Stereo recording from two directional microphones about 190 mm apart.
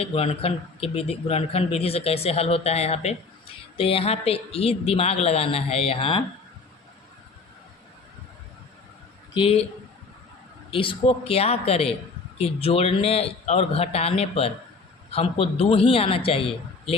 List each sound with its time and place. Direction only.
0.0 s a man's voice: 30° left (ahead or behind)
9.3 s a man's voice: 30° left (ahead or behind)
10.7 s a man's voice: 30° left (ahead or behind)